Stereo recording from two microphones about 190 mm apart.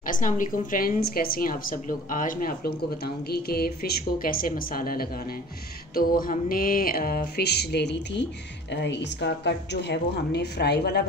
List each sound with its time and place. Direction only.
0.0 s speech: 45° left (ahead or behind); by 11.1 s 60° left (ahead or behind)